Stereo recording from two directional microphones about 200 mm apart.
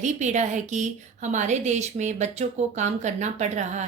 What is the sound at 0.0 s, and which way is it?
A woman's voice, 35° right (ahead or behind).